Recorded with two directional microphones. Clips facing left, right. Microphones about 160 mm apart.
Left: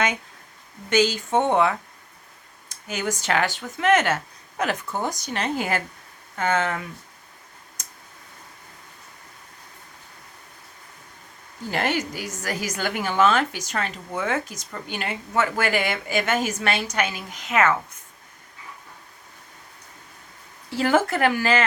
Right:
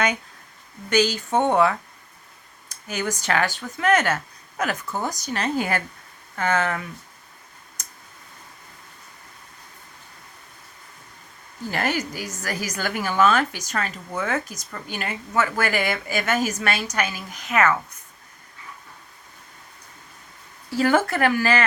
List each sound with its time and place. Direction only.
0.9 s a woman's voice: 20° left (ahead or behind)
4.9 s a woman's voice: 15° left (ahead or behind)
11.7 s a woman's voice: 25° left (ahead or behind)
20.7 s a woman's voice: 20° left (ahead or behind)